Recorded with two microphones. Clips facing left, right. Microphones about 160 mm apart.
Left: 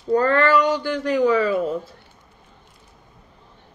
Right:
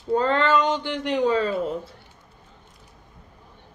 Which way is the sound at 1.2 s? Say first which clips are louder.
Left 3 dB; 90° left.